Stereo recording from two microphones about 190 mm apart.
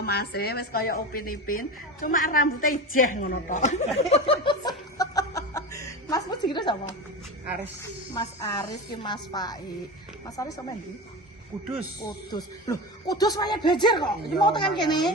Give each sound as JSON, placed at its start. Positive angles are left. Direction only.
{"t": 0.0, "sound": "speech", "side_deg": 55}
{"t": 4.9, "sound": "music", "side_deg": 20}
{"t": 8.1, "sound": "speech", "side_deg": 20}
{"t": 12.0, "sound": "speech", "side_deg": 20}